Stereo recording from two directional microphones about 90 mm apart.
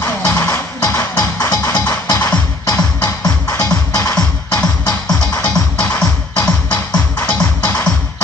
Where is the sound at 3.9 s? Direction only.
40° left (ahead or behind).